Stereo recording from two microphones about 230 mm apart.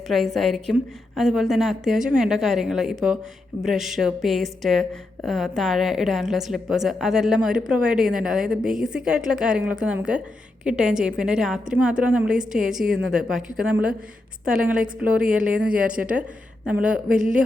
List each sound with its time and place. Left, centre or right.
0.1 s a woman's voice: centre
15.9 s speech: right
16.6 s a woman's voice: centre